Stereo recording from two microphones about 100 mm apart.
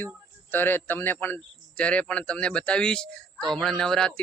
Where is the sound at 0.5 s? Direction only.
20° left (ahead or behind).